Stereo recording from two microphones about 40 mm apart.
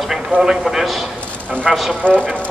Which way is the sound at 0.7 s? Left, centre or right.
Centre.